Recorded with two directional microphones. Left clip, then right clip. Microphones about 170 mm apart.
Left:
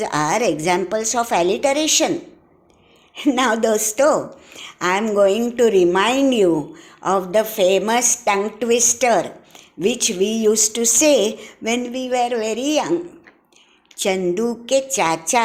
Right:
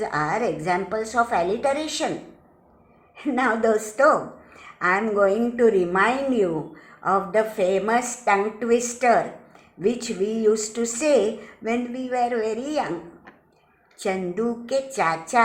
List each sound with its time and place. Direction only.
0.0 s a woman's voice: 50° left (ahead or behind)
3.2 s a woman's voice: 50° left (ahead or behind)
13.9 s a woman's voice: 50° left (ahead or behind)